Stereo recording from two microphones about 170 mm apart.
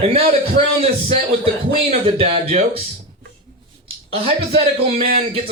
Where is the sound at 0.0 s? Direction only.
35° right (ahead or behind).